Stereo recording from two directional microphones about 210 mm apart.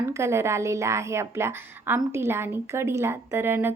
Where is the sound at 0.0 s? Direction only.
15° right (ahead or behind).